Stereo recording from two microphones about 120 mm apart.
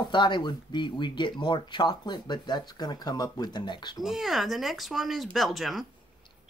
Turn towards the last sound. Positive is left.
turn(degrees=0)  # may be behind; listen again after turning